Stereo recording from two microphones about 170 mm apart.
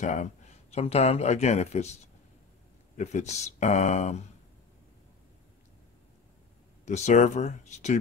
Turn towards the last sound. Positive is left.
turn(degrees=40)  # may be behind; listen again after turning